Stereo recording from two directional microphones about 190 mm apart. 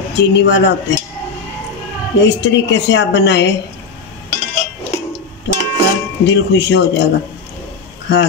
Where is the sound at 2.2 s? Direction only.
70° left (ahead or behind).